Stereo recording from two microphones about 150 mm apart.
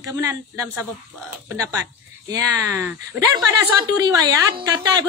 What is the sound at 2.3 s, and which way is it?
A woman's voice, 25° right (ahead or behind).